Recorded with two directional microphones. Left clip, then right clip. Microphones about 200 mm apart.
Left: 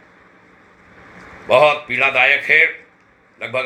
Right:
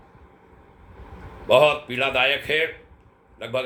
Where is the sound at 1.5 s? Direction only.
20° right (ahead or behind).